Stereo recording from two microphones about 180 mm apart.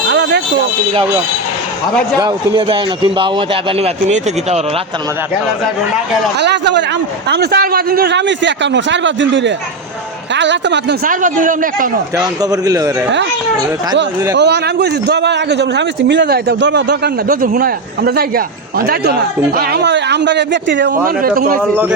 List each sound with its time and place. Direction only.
0.1 s a sound: 75° right (ahead or behind)
2.1 s a man's voice: 25° right (ahead or behind)
6.4 s a man's voice: 75° right (ahead or behind)
11.0 s a man's voice: 45° right (ahead or behind)
12.1 s a man's voice: 20° right (ahead or behind)
14.3 s a man's voice: 70° right (ahead or behind)
17.2 s a man's voice: 45° right (ahead or behind); by 20.9 s 80° right
21.2 s a man's voice: 55° right (ahead or behind)